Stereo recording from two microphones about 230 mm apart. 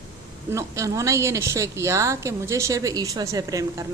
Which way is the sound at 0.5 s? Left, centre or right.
Centre.